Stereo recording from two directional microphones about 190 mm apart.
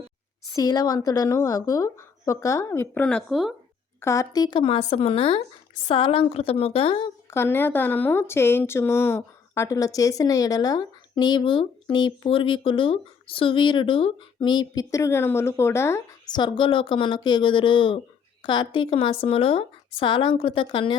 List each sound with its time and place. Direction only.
0.5 s a woman's voice: 20° left (ahead or behind); by 3.5 s centre (ahead or behind)
4.0 s speech: 15° left (ahead or behind)
7.3 s speech: 15° left (ahead or behind)